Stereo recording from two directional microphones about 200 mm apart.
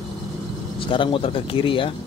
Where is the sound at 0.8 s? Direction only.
25° left (ahead or behind).